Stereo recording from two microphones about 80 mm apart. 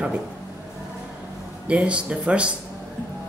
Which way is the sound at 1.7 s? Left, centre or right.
Centre.